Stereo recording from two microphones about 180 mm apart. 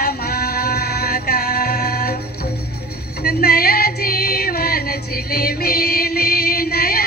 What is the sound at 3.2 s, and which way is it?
Music, 55° left (ahead or behind).